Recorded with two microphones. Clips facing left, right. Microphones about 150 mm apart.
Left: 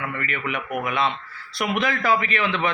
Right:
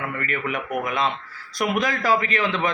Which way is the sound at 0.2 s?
45° right (ahead or behind).